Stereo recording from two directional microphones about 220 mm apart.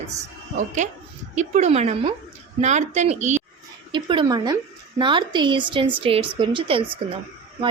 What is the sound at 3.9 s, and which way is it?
A woman's voice, 20° right (ahead or behind).